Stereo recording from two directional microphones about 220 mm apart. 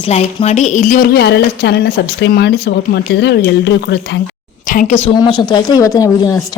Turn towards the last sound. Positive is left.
turn(degrees=15)  # may be behind; listen again after turning